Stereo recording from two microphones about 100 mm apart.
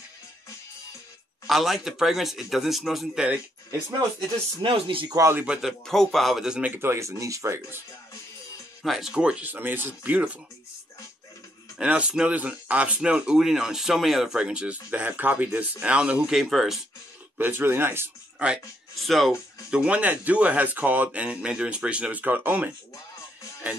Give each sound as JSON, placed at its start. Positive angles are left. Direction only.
{"t": 1.5, "sound": "speech", "side_deg": 0}
{"t": 4.6, "sound": "speech", "side_deg": -60}
{"t": 5.1, "sound": "speech", "side_deg": -25}
{"t": 5.4, "sound": "speech", "side_deg": -10}
{"t": 6.7, "sound": "speech", "side_deg": -25}
{"t": 8.8, "sound": "speech", "side_deg": -5}
{"t": 11.8, "sound": "speech", "side_deg": -10}
{"t": 17.4, "sound": "speech", "side_deg": -20}
{"t": 18.9, "sound": "speech", "side_deg": 0}
{"t": 19.7, "sound": "speech", "side_deg": -10}